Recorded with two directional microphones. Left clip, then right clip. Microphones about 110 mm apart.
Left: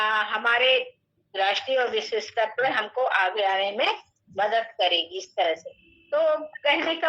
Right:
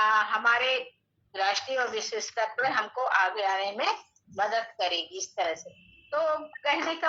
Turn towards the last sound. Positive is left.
turn(degrees=25)  # may be behind; listen again after turning